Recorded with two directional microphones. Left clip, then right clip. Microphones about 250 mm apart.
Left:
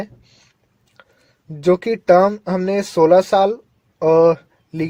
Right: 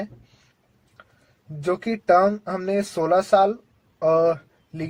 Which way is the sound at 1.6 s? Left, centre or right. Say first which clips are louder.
Left 7 dB; left.